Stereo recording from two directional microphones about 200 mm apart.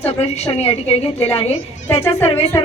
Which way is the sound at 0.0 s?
30° left (ahead or behind).